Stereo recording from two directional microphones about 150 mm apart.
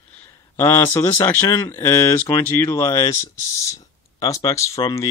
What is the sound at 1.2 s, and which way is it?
Speech, 15° left (ahead or behind).